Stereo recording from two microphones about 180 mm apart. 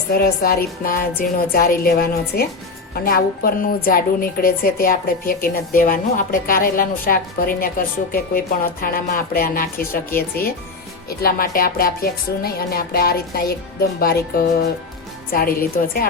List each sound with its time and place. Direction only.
0.1 s a woman's voice: 60° left (ahead or behind)
15.3 s a woman's voice: 55° left (ahead or behind)